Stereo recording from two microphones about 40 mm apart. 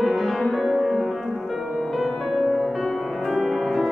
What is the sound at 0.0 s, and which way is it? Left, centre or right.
Music, centre.